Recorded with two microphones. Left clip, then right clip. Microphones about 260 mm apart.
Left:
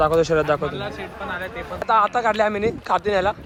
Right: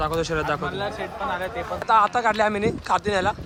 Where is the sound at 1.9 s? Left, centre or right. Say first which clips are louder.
Left 1 dB; centre.